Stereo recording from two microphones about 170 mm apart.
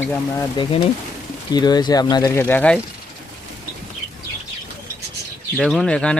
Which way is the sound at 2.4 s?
10° left (ahead or behind).